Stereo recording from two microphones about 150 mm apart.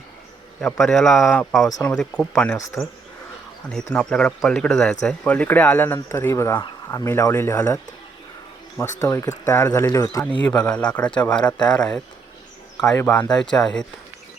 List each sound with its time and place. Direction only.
0.6 s speech: centre (ahead or behind)
2.6 s speech: 20° left (ahead or behind)
3.9 s speech: 5° left (ahead or behind)
8.8 s speech: 20° left (ahead or behind)
10.6 s speech: 5° left (ahead or behind)
13.0 s speech: 10° left (ahead or behind)